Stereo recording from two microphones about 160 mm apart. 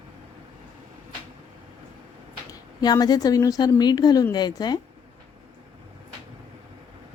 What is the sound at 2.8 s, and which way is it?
A woman's voice, 25° left (ahead or behind).